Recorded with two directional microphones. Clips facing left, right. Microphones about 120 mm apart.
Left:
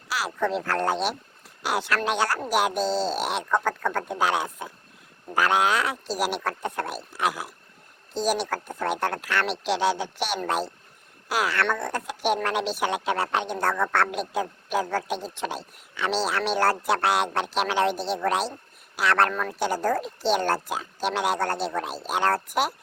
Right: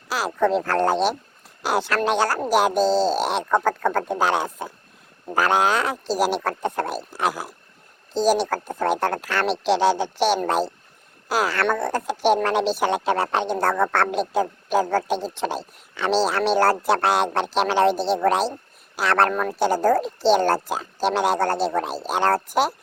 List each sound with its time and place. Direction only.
0.1 s speech: 45° right (ahead or behind)